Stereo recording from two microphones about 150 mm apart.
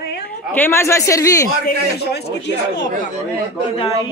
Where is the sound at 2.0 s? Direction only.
90° left.